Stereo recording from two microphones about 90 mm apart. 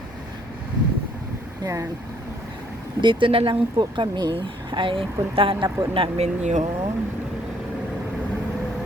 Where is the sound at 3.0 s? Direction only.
70° right (ahead or behind); by 6.1 s 90° right.